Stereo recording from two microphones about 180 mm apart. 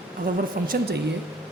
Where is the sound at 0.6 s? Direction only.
55° right (ahead or behind).